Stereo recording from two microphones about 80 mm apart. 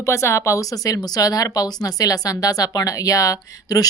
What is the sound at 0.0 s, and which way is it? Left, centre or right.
Speech, left.